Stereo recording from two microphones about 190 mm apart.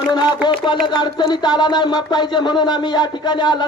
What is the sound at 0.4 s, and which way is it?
A man's voice, 25° left (ahead or behind).